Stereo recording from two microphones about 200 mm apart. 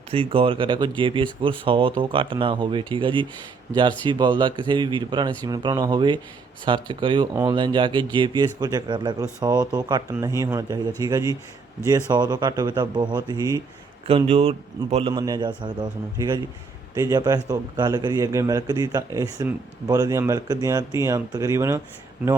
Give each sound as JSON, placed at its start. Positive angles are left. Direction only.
{"t": 0.1, "sound": "speech", "side_deg": -25}
{"t": 14.1, "sound": "a man's voice", "side_deg": -30}